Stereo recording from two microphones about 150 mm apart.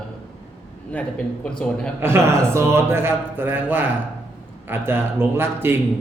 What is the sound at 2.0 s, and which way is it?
A man's voice, 15° right (ahead or behind).